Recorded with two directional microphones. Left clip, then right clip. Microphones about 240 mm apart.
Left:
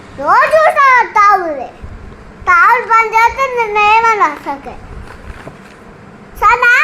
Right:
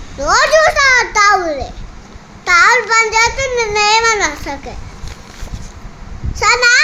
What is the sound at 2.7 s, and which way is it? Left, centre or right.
A child's voice, centre.